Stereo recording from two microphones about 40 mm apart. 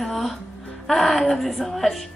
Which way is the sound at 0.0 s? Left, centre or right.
Centre.